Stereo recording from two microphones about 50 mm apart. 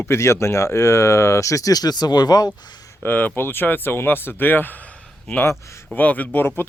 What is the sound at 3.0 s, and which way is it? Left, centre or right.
Speech, left.